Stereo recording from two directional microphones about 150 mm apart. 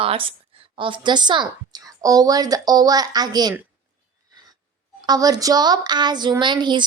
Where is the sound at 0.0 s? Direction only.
40° right (ahead or behind).